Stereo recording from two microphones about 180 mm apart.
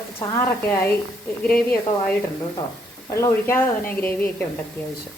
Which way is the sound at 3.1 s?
15° left (ahead or behind).